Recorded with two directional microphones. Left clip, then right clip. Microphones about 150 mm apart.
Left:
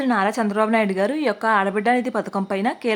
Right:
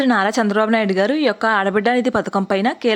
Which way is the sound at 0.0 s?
25° right (ahead or behind).